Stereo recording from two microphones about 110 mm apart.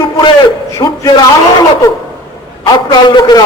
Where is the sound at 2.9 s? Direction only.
40° left (ahead or behind).